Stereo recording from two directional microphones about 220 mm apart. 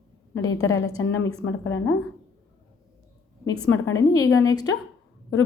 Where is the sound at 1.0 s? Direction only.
55° left (ahead or behind).